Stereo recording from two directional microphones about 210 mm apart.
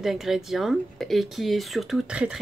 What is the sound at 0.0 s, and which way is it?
Speech, centre (ahead or behind).